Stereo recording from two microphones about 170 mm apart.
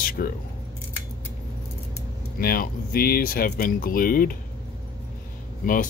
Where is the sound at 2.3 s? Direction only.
60° left (ahead or behind).